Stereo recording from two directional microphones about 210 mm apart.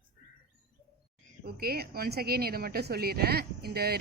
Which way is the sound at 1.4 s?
45° right (ahead or behind).